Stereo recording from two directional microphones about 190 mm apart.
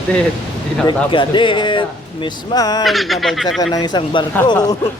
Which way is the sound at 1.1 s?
25° left (ahead or behind).